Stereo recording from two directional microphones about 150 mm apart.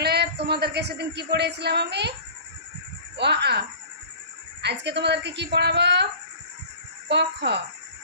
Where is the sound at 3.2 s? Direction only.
90° right.